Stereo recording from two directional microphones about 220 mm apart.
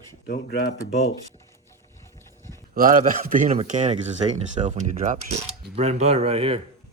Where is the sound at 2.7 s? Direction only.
40° right (ahead or behind).